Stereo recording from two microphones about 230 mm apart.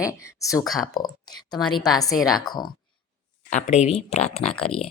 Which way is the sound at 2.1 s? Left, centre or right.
Centre.